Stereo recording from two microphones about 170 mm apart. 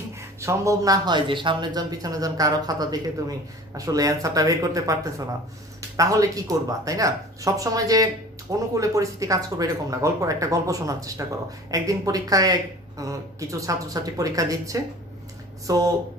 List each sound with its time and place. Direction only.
0.2 s a man's voice: 15° right (ahead or behind)